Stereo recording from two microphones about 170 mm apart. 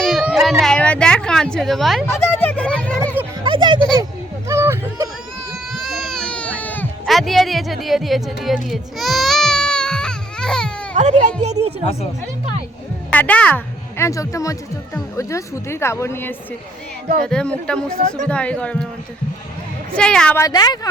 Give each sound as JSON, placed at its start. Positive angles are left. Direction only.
{"t": 0.0, "sound": "a sound", "side_deg": 0}
{"t": 0.6, "sound": "a woman's voice", "side_deg": 5}
{"t": 2.0, "sound": "speech", "side_deg": 10}
{"t": 3.4, "sound": "music", "side_deg": -30}
{"t": 4.4, "sound": "a sound", "side_deg": -15}
{"t": 5.7, "sound": "baby cry", "side_deg": 0}
{"t": 10.9, "sound": "music", "side_deg": -45}
{"t": 13.1, "sound": "speech", "side_deg": 10}
{"t": 20.0, "sound": "speech", "side_deg": 5}
{"t": 20.4, "sound": "speech", "side_deg": 25}